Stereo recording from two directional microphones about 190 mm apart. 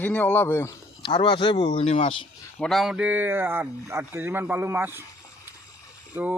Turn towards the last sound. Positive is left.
turn(degrees=-10)  # may be behind; listen again after turning